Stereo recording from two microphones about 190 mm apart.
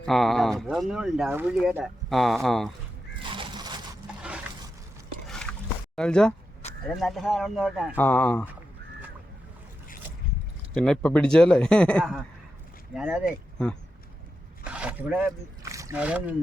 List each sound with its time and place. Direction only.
0.0 s speech: centre (ahead or behind)
3.2 s a sound: 25° right (ahead or behind)
5.3 s a sound: 5° left (ahead or behind)
6.0 s speech: 5° left (ahead or behind)
7.9 s speech: 10° left (ahead or behind)
10.8 s speech: 5° left (ahead or behind)
12.9 s speech: 5° right (ahead or behind)
14.6 s a sound: 5° right (ahead or behind)
16.0 s speech: 5° right (ahead or behind)